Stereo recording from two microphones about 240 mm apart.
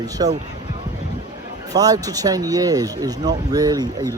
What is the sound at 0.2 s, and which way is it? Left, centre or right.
Speech, centre.